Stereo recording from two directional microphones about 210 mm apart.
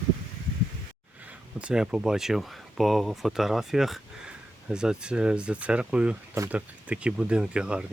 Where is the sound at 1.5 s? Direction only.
5° right (ahead or behind).